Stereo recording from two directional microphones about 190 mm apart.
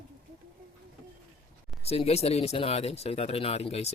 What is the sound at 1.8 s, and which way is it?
Speech, 35° left (ahead or behind).